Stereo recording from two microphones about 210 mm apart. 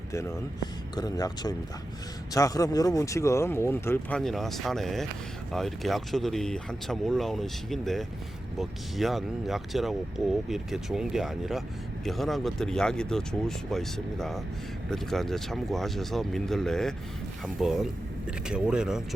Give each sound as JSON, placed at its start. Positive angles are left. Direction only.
{"t": 0.1, "sound": "speech", "side_deg": 15}